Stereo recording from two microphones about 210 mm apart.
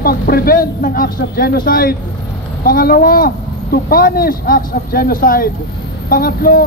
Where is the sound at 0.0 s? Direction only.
45° left (ahead or behind).